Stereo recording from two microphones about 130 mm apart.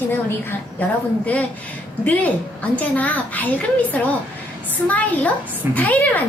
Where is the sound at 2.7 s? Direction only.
10° left (ahead or behind).